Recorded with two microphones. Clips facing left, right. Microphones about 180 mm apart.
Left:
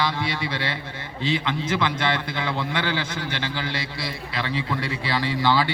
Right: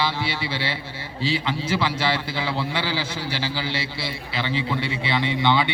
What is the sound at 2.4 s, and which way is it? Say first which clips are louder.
Speech: even; 5° right (ahead or behind).